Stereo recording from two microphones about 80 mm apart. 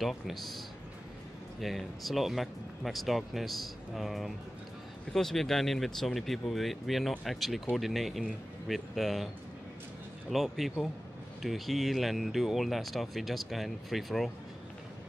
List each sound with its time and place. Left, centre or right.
0.0 s speech: centre
1.6 s speech: centre
10.3 s speech: centre